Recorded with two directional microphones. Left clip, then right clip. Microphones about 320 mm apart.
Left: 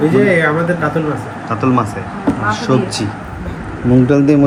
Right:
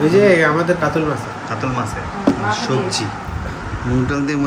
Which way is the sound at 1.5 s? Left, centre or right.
Centre.